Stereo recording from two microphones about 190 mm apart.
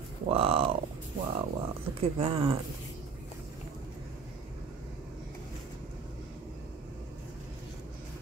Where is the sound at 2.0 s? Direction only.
30° right (ahead or behind).